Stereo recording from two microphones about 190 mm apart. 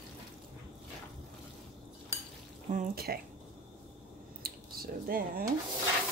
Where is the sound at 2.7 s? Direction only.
45° right (ahead or behind).